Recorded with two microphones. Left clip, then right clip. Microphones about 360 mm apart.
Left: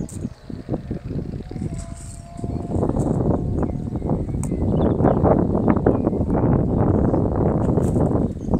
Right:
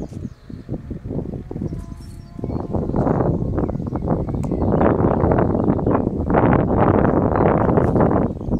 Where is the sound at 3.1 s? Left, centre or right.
Right.